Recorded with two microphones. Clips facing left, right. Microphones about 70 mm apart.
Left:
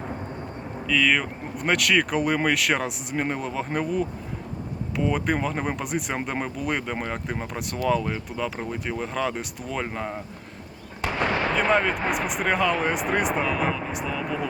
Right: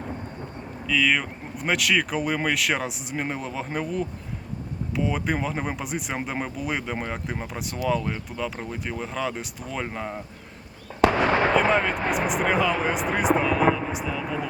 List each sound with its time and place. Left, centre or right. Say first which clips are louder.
0.9 s speech: left 1 dB; centre
11.0 s fireworks: right 9 dB; right
11.5 s speech: right 1 dB; centre